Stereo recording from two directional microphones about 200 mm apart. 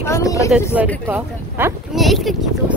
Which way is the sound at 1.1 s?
10° right (ahead or behind).